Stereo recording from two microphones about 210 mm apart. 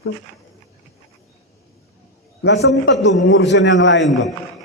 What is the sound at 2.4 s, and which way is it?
A man's voice, 55° left (ahead or behind).